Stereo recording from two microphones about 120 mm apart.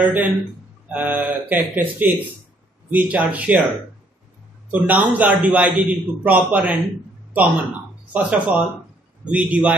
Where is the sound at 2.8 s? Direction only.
10° right (ahead or behind).